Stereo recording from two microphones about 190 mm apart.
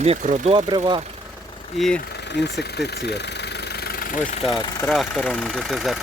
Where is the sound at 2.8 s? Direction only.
60° left (ahead or behind).